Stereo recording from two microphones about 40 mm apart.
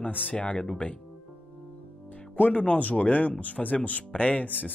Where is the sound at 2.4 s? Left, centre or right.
Left.